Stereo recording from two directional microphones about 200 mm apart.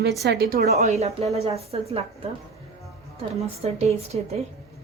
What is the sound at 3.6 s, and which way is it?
Speech, 30° right (ahead or behind).